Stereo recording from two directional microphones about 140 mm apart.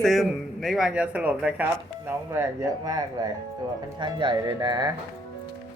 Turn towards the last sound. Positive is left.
turn(degrees=-30)  # may be behind; listen again after turning